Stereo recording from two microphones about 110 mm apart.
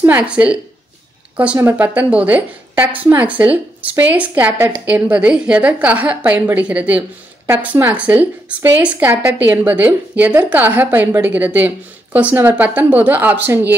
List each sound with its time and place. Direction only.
0.0 s a woman's voice: 15° right (ahead or behind)